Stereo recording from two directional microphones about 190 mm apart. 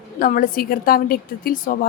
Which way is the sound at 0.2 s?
45° left (ahead or behind).